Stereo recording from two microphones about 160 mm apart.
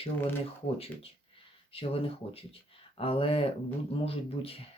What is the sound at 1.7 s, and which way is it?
Speech, 35° left (ahead or behind).